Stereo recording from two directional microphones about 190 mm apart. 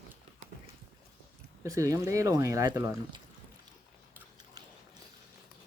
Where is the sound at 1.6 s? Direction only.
15° right (ahead or behind).